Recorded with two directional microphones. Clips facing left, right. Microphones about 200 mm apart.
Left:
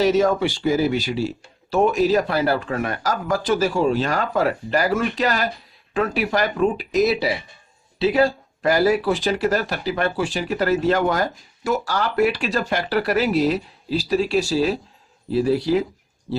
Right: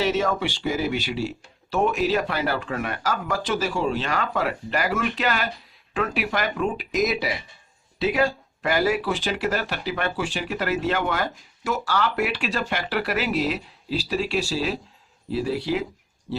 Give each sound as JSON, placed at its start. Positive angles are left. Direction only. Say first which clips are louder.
{"t": 0.0, "sound": "speech", "louder": "left 6 dB", "side_deg": 40}